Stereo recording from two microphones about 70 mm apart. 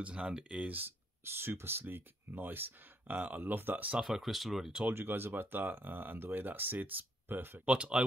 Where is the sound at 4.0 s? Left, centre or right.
Centre.